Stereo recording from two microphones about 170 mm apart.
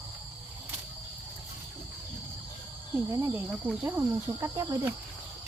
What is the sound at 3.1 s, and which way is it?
Speech, 15° right (ahead or behind).